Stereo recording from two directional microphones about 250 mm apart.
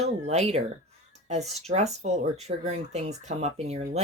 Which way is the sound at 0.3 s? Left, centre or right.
Right.